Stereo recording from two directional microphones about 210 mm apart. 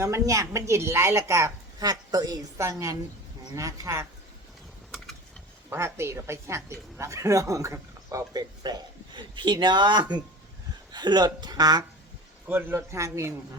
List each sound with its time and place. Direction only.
0.0 s a woman's voice: 15° right (ahead or behind)
5.7 s a woman's voice: 10° right (ahead or behind)